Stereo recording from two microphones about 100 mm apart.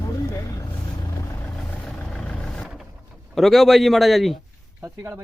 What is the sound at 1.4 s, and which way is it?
Vehicle, 15° left (ahead or behind).